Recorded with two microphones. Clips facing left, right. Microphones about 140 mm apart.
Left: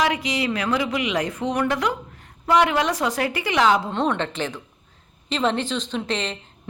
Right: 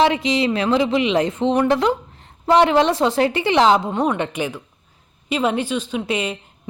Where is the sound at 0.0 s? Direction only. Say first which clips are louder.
Right 6 dB; 25° right (ahead or behind).